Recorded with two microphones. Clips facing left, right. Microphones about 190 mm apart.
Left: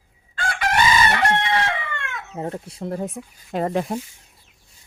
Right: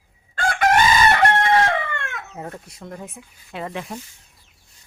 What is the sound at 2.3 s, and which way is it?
Speech, 30° left (ahead or behind).